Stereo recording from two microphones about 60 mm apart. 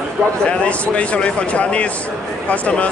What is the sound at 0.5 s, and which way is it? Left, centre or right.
Speech, centre.